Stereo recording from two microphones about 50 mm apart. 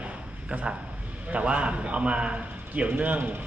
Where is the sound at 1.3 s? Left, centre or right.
Right.